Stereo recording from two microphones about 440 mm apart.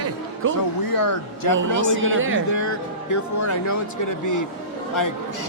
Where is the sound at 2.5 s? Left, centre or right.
Left.